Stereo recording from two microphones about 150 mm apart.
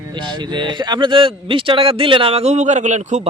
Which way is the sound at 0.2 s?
30° right (ahead or behind).